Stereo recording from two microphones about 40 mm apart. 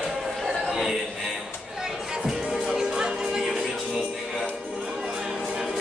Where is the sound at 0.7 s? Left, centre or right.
Centre.